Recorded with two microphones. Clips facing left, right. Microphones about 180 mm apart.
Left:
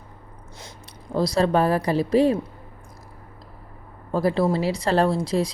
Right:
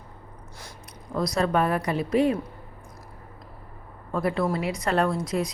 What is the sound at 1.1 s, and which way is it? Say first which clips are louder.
A woman's voice: left 4 dB; 30° left (ahead or behind).